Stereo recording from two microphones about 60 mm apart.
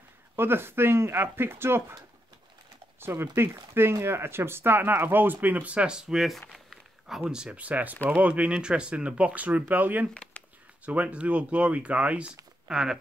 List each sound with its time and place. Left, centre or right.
0.4 s speech: right
3.0 s speech: right; by 12.9 s centre